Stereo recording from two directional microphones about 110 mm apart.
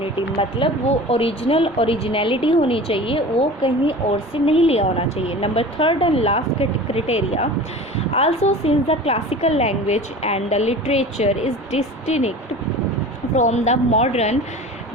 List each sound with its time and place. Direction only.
0.2 s a woman's voice: 50° left (ahead or behind); by 12.3 s 90° left
13.3 s a woman's voice: 90° left